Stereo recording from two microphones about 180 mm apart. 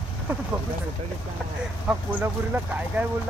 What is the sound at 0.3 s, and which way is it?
Speech, 10° right (ahead or behind).